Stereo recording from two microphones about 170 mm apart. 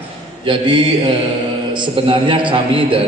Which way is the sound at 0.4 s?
30° right (ahead or behind).